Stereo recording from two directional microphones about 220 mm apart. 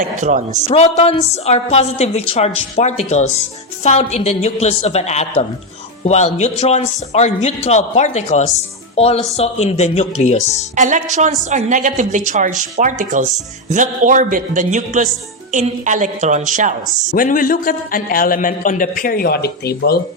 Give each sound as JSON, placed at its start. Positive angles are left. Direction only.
{"t": 0.0, "sound": "a woman's voice", "side_deg": -35}
{"t": 0.7, "sound": "a woman's voice", "side_deg": 30}
{"t": 10.8, "sound": "a woman's voice", "side_deg": -35}
{"t": 17.2, "sound": "a man's voice", "side_deg": 40}